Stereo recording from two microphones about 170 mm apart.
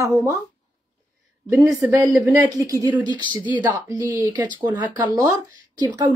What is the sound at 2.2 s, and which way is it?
Speech, 20° right (ahead or behind).